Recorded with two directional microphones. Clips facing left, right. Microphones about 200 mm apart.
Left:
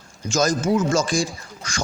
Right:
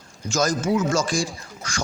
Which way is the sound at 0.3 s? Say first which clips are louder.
Left 2 dB; 20° left (ahead or behind).